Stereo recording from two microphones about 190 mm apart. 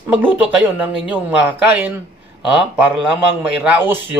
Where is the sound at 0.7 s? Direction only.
5° right (ahead or behind).